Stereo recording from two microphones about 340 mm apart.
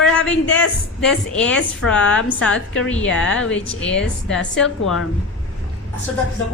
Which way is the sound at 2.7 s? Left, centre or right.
Left.